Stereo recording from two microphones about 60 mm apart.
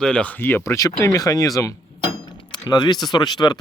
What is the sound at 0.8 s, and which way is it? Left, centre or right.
Speech, left.